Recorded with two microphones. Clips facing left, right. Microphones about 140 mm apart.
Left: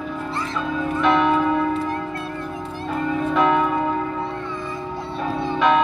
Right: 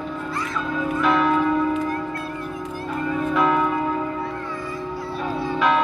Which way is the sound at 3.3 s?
Centre (ahead or behind).